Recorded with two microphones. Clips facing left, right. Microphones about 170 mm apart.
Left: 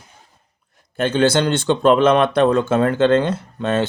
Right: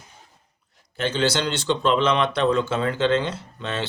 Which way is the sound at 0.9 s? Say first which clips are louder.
Left 7 dB; 50° left (ahead or behind).